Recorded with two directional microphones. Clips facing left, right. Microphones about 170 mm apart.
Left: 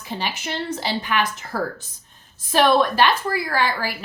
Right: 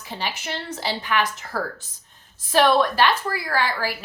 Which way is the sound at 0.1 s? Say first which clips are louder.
Left 2 dB; 20° left (ahead or behind).